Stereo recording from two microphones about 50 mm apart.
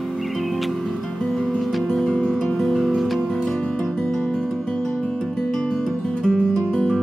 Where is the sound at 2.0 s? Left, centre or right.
Left.